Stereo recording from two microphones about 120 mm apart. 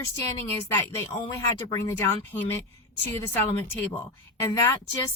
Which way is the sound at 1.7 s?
20° left (ahead or behind).